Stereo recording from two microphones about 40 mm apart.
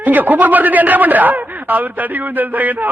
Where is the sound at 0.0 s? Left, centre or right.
Right.